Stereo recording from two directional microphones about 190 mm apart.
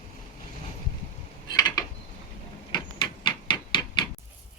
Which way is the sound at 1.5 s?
25° left (ahead or behind).